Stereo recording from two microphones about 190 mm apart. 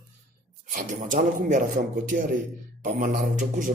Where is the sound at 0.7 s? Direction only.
45° right (ahead or behind).